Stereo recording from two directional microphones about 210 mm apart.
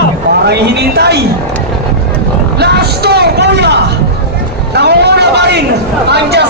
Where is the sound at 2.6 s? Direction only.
50° right (ahead or behind).